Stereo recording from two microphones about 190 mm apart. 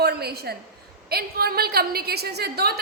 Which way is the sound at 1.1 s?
55° right (ahead or behind).